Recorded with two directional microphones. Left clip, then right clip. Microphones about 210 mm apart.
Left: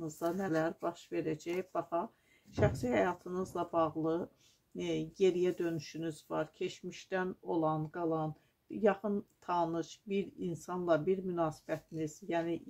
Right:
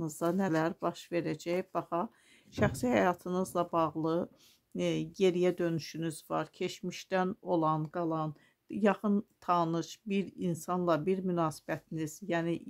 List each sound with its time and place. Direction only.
0.0 s speech: 45° right (ahead or behind)